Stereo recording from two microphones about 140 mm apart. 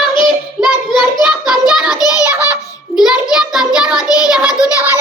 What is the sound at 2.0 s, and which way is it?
Music, 25° left (ahead or behind).